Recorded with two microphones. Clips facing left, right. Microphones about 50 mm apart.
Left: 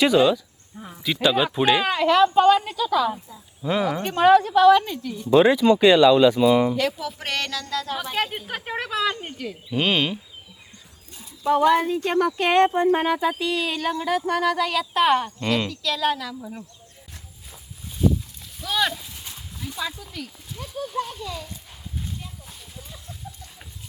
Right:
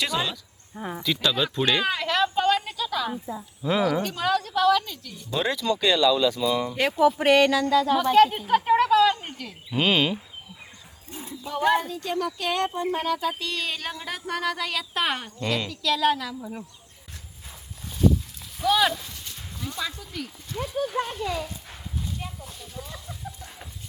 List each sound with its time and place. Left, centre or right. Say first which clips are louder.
0.0 s speech: left 10 dB; centre
4.0 s speech: left 9 dB; left
7.2 s a sound: right 10 dB; centre
7.9 s speech: right 9 dB; centre
11.1 s a sound: right 8 dB; right
11.4 s speech: left 5 dB; left
13.4 s speech: left 6 dB; centre
18.6 s clip-clop: right 3 dB; centre
19.5 s speech: left 1 dB; centre